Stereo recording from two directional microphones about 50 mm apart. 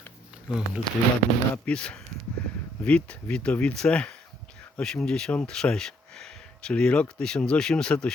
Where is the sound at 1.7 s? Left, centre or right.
Centre.